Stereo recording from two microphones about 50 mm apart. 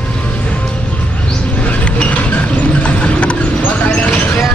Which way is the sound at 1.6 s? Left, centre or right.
Left.